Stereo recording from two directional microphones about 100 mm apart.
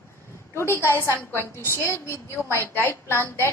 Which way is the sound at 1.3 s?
25° left (ahead or behind).